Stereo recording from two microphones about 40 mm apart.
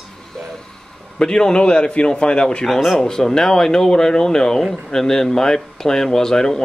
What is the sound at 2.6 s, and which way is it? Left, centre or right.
Speech, centre.